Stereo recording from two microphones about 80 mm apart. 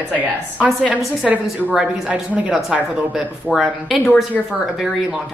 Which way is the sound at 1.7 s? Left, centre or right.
Centre.